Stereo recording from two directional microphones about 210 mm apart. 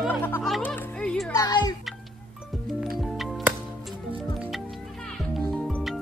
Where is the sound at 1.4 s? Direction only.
20° left (ahead or behind).